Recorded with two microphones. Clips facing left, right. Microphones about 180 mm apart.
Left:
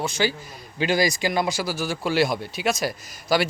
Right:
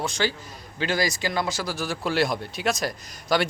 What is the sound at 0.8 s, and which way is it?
Speech, 15° left (ahead or behind).